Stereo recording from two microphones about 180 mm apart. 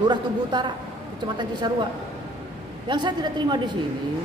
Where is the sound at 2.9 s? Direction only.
25° right (ahead or behind).